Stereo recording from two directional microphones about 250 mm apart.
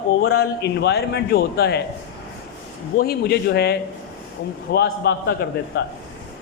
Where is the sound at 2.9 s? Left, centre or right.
Left.